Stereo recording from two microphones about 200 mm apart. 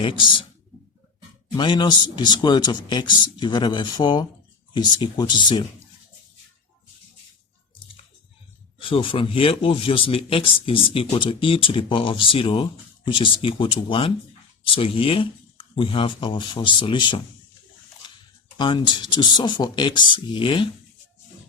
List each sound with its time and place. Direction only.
0.0 s speech: 25° left (ahead or behind)
1.5 s speech: 25° left (ahead or behind)
8.9 s speech: 25° left (ahead or behind)
18.0 s a sound: 20° left (ahead or behind)
18.5 s speech: 25° left (ahead or behind)